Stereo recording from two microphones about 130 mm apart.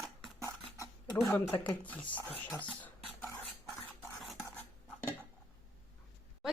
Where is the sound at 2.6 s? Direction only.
10° left (ahead or behind).